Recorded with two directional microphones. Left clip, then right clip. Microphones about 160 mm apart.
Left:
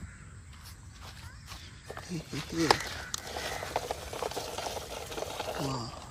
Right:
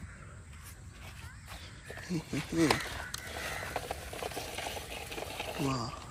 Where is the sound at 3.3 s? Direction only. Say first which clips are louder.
Left 2 dB; 45° left (ahead or behind).